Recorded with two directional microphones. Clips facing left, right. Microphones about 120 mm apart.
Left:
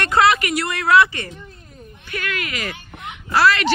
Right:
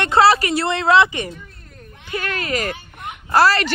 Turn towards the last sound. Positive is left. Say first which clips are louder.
# right 1 dB
turn(degrees=-40)  # may be behind; listen again after turning